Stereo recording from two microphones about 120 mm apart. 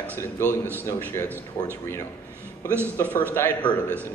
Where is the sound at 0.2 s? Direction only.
20° left (ahead or behind).